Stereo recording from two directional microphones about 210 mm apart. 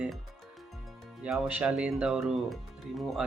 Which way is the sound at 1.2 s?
5° right (ahead or behind).